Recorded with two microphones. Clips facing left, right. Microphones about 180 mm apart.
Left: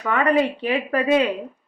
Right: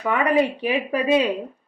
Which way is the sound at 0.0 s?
15° right (ahead or behind).